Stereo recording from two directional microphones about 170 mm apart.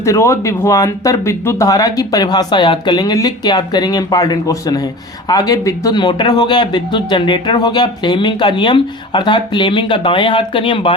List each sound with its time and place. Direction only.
0.0 s speech: 15° left (ahead or behind)